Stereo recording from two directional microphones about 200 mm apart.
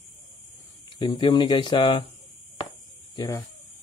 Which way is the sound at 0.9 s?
25° left (ahead or behind).